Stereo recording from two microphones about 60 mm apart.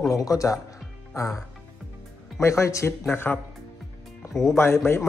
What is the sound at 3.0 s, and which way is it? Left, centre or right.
Speech, left.